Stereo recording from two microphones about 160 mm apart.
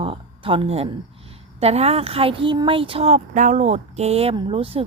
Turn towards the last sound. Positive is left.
turn(degrees=-35)  # may be behind; listen again after turning